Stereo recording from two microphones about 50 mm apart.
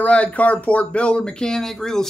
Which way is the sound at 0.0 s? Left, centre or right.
Left.